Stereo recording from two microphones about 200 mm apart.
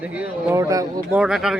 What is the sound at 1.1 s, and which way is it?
Speech, 5° right (ahead or behind).